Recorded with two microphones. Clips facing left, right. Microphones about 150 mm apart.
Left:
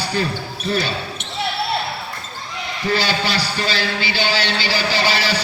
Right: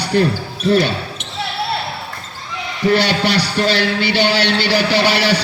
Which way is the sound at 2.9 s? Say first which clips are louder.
Right 5 dB; 65° right (ahead or behind).